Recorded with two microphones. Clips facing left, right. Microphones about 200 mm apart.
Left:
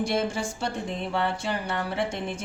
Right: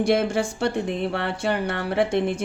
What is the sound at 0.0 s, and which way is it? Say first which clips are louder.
Speech: right 6 dB; 65° right (ahead or behind).